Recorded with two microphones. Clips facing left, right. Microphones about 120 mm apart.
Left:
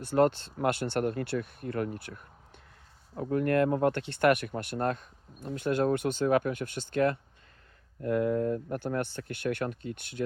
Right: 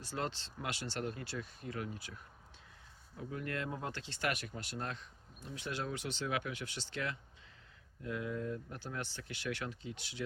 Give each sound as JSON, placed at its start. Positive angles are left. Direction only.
{"t": 0.0, "sound": "speech", "side_deg": 55}